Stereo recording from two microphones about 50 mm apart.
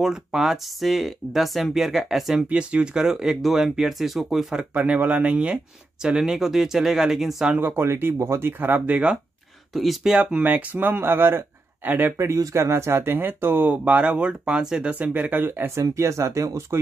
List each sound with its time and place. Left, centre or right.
0.0 s speech: centre
2.5 s speech: centre
4.7 s speech: right
6.0 s speech: centre
7.5 s speech: right
8.8 s speech: right
9.7 s speech: centre
10.1 s speech: right
11.0 s speech: right
12.2 s speech: right; by 14.9 s centre
14.9 s speech: right